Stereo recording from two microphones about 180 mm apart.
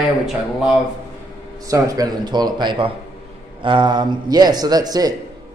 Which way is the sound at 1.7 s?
20° right (ahead or behind).